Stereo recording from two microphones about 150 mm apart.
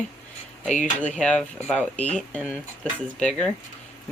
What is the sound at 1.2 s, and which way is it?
Speech, 5° left (ahead or behind).